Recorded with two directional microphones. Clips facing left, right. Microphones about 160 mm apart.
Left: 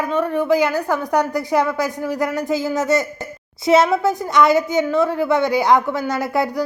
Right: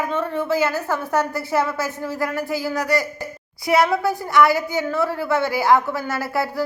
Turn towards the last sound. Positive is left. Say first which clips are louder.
# left 3 dB
turn(degrees=20)  # may be behind; listen again after turning